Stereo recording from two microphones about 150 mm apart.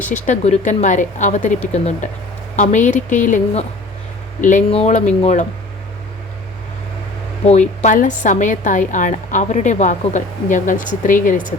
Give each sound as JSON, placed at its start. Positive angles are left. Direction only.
{"t": 0.1, "sound": "a woman's voice", "side_deg": 55}
{"t": 4.7, "sound": "speech", "side_deg": 45}
{"t": 7.8, "sound": "a woman's voice", "side_deg": 55}